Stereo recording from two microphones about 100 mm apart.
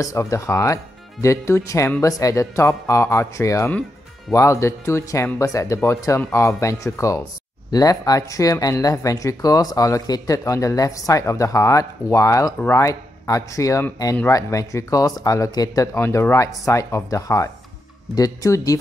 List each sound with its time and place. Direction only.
0.0 s speech: 30° left (ahead or behind)